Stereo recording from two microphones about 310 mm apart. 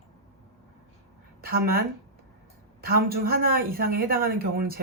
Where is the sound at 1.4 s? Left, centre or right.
Right.